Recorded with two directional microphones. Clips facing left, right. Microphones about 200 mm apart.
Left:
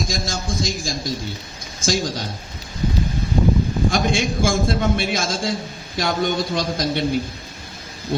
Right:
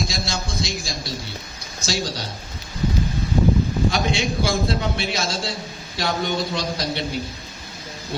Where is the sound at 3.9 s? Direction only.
50° left (ahead or behind).